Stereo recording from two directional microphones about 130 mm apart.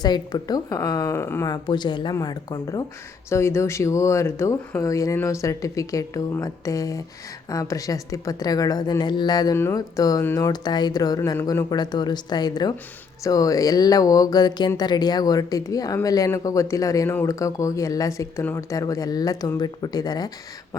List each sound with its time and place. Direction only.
0.0 s speech: 30° left (ahead or behind)
1.5 s speech: 35° left (ahead or behind)